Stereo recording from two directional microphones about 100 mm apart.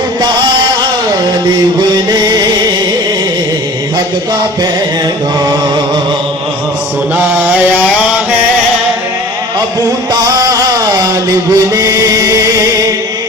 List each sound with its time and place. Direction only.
2.0 s music: 40° right (ahead or behind)
7.2 s mantra: 20° right (ahead or behind)
10.1 s music: 40° right (ahead or behind)